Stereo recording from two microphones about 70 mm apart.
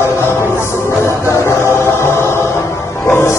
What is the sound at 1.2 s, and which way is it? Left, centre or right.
Choir, left.